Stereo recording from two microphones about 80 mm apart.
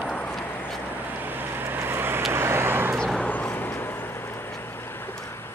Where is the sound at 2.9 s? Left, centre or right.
Centre.